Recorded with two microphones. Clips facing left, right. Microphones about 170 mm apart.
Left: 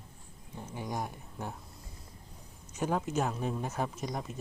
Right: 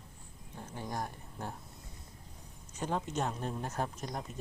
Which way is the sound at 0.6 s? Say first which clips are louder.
Left 2 dB; 15° left (ahead or behind).